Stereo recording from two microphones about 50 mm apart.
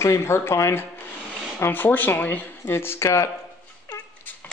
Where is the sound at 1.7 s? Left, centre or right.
Left.